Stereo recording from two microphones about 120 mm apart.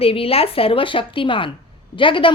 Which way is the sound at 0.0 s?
55° left (ahead or behind).